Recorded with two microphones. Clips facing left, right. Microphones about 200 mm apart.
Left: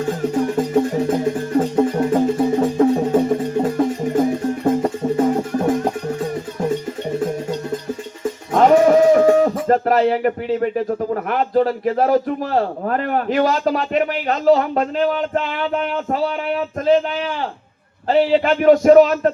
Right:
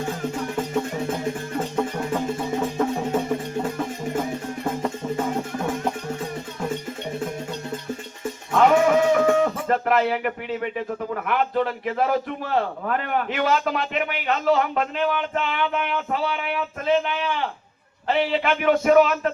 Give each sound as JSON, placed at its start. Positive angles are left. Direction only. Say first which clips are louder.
{"t": 0.1, "sound": "music", "louder": "left 8 dB", "side_deg": 40}
{"t": 8.5, "sound": "speech", "louder": "left 5 dB", "side_deg": 40}